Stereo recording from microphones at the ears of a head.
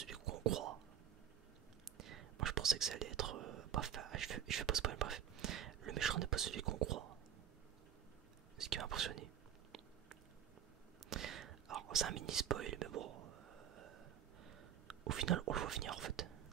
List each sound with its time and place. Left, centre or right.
0.0 s whispering: right
2.0 s whispering: right
8.5 s whispering: right